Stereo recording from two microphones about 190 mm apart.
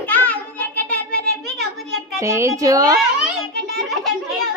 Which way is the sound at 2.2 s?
15° right (ahead or behind).